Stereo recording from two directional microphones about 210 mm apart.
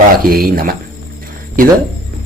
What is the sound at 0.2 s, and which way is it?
A man's voice, 45° right (ahead or behind).